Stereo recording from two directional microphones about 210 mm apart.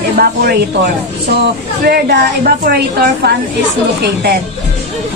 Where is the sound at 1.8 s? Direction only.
45° right (ahead or behind).